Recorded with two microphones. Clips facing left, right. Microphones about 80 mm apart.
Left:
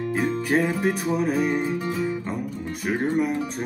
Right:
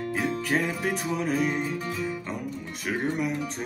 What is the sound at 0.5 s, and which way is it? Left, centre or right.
Music, centre.